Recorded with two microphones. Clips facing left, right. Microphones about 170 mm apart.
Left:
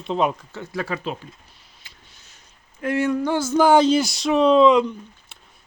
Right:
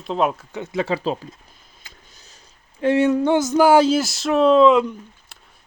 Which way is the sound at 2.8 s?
25° right (ahead or behind).